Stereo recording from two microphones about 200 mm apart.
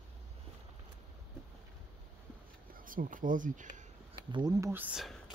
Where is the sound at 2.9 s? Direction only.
45° right (ahead or behind).